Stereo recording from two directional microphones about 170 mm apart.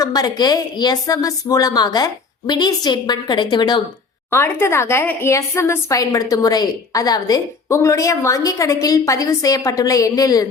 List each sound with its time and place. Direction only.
0.0 s a woman's voice: 20° left (ahead or behind)
4.3 s a woman's voice: 15° left (ahead or behind)